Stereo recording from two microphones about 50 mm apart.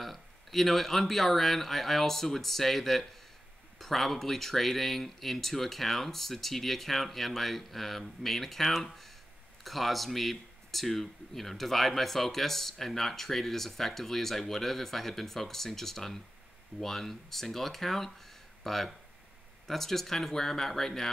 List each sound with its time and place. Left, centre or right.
0.0 s speech: centre